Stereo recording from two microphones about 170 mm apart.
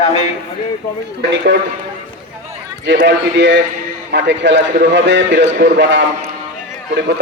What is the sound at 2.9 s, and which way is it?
A man's voice, 90° right.